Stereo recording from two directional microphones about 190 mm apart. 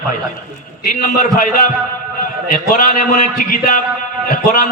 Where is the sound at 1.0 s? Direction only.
50° left (ahead or behind).